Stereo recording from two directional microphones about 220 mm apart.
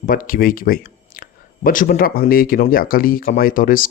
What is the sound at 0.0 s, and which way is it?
Speech, 40° left (ahead or behind).